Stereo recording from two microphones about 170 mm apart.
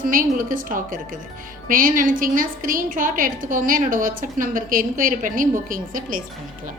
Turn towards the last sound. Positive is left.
turn(degrees=-50)  # may be behind; listen again after turning